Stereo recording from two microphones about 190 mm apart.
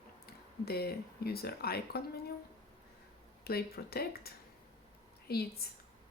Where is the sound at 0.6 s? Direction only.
55° left (ahead or behind).